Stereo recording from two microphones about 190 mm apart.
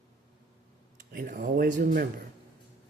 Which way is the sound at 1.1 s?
50° right (ahead or behind).